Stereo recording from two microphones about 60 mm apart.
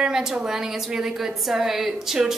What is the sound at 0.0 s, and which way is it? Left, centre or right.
A woman's voice, centre.